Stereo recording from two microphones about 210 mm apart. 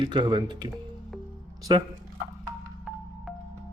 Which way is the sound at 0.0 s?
20° right (ahead or behind).